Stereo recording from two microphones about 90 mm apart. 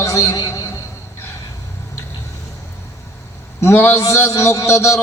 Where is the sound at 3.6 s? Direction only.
25° left (ahead or behind).